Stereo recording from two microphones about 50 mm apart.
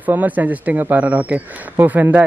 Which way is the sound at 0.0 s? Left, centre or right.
Right.